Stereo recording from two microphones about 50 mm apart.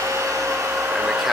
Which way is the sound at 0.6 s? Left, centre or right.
Right.